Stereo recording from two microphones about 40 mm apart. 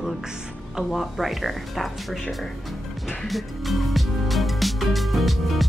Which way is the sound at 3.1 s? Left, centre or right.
Centre.